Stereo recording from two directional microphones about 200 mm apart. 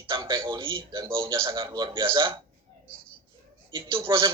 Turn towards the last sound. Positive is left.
turn(degrees=-25)  # may be behind; listen again after turning